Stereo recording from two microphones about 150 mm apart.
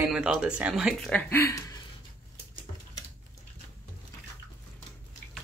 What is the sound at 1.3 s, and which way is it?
Speech, 20° left (ahead or behind).